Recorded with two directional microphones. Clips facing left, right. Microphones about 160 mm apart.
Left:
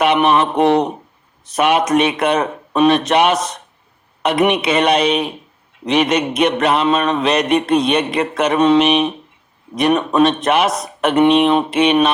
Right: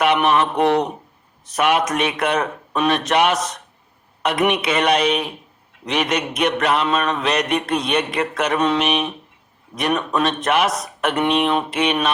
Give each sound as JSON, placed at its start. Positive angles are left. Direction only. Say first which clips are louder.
{"t": 0.0, "sound": "mantra", "louder": "left 3 dB", "side_deg": 25}